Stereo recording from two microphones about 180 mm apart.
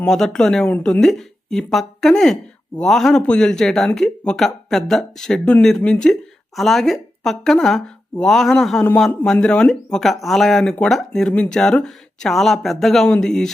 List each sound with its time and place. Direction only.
0.0 s speech: 5° left (ahead or behind)